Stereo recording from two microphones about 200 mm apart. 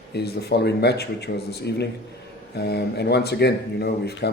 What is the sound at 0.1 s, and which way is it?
Speech, 55° left (ahead or behind).